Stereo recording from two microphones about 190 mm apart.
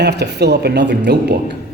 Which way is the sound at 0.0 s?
60° right (ahead or behind).